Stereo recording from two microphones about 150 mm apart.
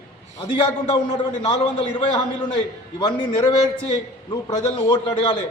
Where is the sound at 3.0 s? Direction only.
30° left (ahead or behind).